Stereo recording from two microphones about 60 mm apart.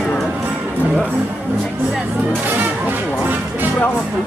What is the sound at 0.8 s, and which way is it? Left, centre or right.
Speech, right.